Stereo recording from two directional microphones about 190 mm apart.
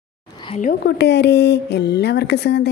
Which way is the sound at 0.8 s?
60° left (ahead or behind).